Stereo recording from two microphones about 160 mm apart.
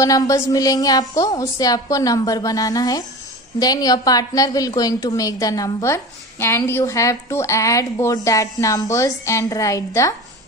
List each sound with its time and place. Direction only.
0.0 s a woman's voice: 20° left (ahead or behind)